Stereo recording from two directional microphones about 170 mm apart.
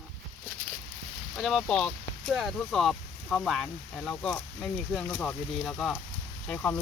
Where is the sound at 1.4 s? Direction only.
Centre (ahead or behind).